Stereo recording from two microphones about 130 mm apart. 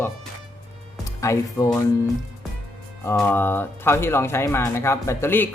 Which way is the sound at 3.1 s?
15° left (ahead or behind).